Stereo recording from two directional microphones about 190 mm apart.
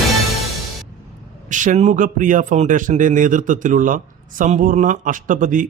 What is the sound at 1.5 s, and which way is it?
A man's voice, 40° right (ahead or behind).